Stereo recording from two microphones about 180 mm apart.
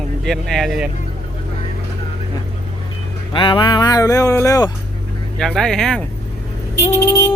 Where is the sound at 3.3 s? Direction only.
25° left (ahead or behind).